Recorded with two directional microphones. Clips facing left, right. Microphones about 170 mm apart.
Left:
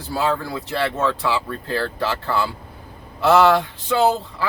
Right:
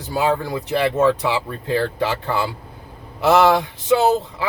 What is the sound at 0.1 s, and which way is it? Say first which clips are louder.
Speech: right 2 dB; 15° right (ahead or behind).